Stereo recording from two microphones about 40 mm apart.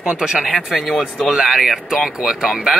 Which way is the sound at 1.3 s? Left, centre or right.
Centre.